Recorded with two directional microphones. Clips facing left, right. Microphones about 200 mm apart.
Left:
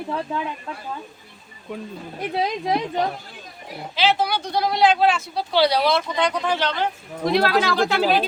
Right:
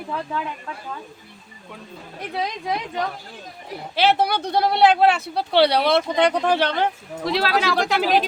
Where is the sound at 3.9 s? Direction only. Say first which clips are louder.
Right 2 dB; 60° right (ahead or behind).